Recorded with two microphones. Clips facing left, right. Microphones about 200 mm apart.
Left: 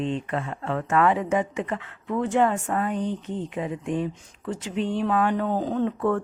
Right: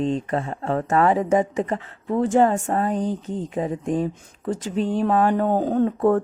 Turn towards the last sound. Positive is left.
turn(degrees=-40)  # may be behind; listen again after turning